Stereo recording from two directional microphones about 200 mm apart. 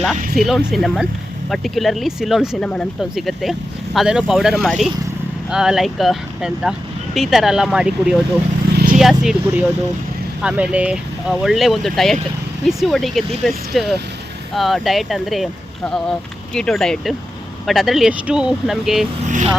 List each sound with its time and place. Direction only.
0.3 s speech: centre (ahead or behind)
8.7 s vehicle: 50° right (ahead or behind)
9.0 s speech: centre (ahead or behind)